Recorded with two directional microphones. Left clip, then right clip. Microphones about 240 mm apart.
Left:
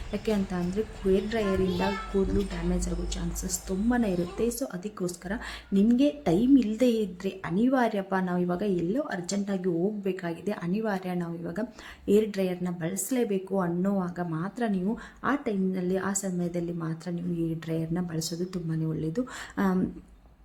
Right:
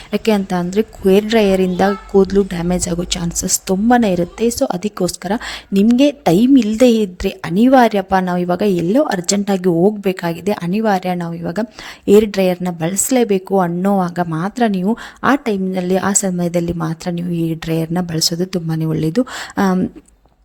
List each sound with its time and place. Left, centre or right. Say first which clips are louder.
0.1 s a woman's voice: right 14 dB; right